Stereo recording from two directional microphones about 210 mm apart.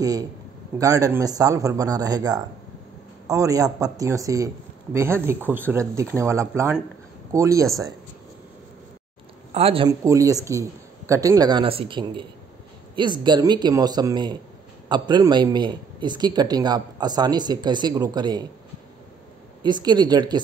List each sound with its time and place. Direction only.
0.0 s speech: 15° right (ahead or behind)
9.5 s a man's voice: 30° right (ahead or behind)
9.8 s a man's voice: 15° right (ahead or behind)
19.6 s a man's voice: 20° right (ahead or behind)